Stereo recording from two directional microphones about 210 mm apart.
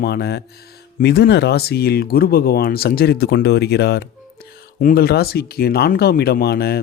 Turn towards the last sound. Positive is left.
turn(degrees=50)  # may be behind; listen again after turning